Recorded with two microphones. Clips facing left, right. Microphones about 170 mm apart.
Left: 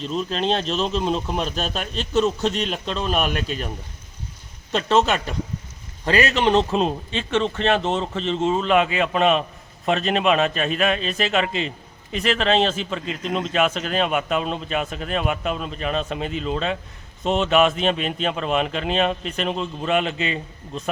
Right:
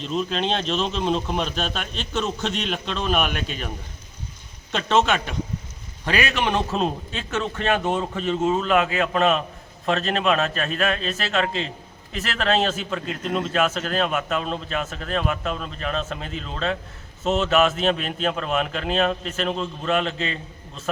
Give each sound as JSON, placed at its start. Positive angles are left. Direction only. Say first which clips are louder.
{"t": 0.3, "sound": "a man's voice", "louder": "left 3 dB", "side_deg": 0}
{"t": 1.5, "sound": "a man's voice", "louder": "left 1 dB", "side_deg": 40}
{"t": 2.0, "sound": "a man's voice", "louder": "left 7 dB", "side_deg": 0}
{"t": 4.7, "sound": "a man's voice", "louder": "left 1 dB", "side_deg": 0}
{"t": 6.3, "sound": "a man's voice", "louder": "left 5 dB", "side_deg": 25}
{"t": 6.7, "sound": "a man's voice", "louder": "left 3 dB", "side_deg": -5}